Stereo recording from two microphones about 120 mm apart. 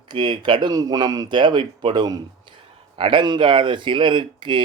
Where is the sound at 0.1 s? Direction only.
40° right (ahead or behind).